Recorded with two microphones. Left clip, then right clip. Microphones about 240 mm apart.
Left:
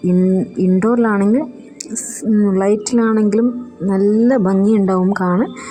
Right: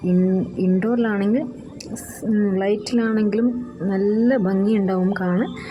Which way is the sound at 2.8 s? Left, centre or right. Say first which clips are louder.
Left 6 dB; centre.